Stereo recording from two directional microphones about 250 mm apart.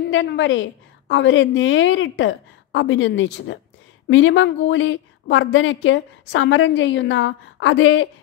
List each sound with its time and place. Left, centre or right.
0.1 s a woman's voice: left